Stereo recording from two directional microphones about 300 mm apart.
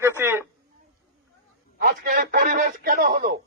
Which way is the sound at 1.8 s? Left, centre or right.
Right.